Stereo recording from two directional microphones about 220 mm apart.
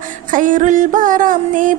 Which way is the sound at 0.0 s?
35° right (ahead or behind).